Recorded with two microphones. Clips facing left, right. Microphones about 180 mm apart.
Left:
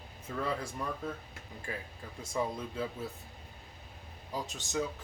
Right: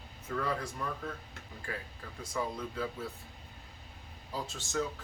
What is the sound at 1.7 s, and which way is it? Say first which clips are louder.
Speech: even; 20° left (ahead or behind).